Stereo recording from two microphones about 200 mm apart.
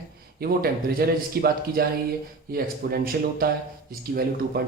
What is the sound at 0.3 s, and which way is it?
Speech, 50° right (ahead or behind).